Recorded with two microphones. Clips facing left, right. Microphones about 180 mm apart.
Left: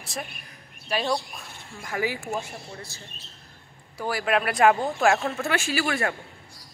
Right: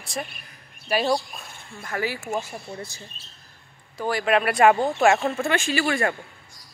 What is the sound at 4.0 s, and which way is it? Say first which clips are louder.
Speech: right 3 dB; 5° left (ahead or behind).